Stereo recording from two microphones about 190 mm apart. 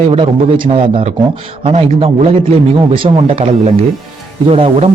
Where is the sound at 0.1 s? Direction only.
25° right (ahead or behind).